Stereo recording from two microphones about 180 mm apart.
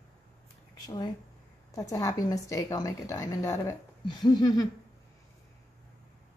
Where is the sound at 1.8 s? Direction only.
20° left (ahead or behind).